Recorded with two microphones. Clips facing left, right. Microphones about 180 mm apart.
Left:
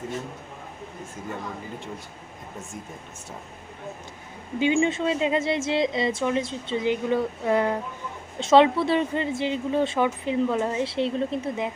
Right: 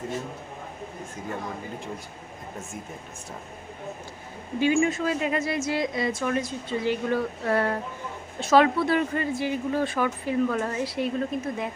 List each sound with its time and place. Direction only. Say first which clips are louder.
4.6 s a woman's voice: left 1 dB; 25° left (ahead or behind)